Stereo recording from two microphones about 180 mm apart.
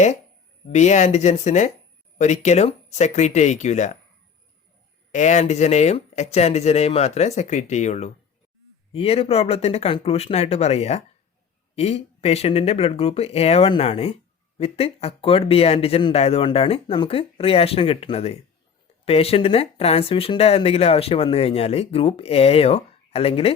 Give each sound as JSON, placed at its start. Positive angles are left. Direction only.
{"t": 0.7, "sound": "speech", "side_deg": 40}
{"t": 5.1, "sound": "speech", "side_deg": 40}